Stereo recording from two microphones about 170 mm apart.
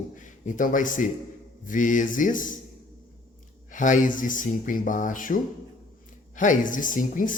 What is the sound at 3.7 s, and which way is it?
Speech, 50° left (ahead or behind).